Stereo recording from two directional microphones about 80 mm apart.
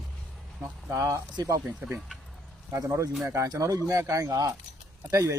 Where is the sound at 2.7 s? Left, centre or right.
Right.